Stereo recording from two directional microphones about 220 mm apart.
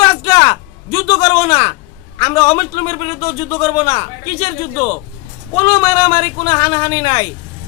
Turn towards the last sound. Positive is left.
turn(degrees=20)  # may be behind; listen again after turning